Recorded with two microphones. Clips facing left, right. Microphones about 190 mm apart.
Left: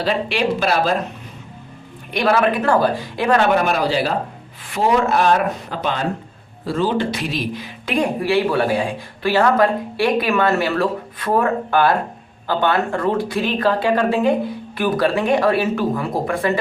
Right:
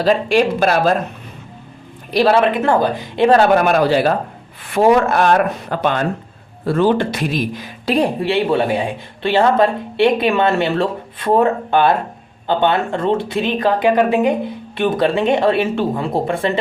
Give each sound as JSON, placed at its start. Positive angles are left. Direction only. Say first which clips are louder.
{"t": 0.0, "sound": "speech", "louder": "right 6 dB", "side_deg": -45}
{"t": 2.1, "sound": "speech", "louder": "right 3 dB", "side_deg": -30}
{"t": 3.3, "sound": "speech", "louder": "right 3 dB", "side_deg": -50}